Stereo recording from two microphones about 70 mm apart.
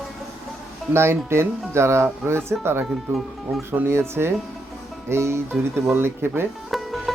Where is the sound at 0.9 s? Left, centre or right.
Right.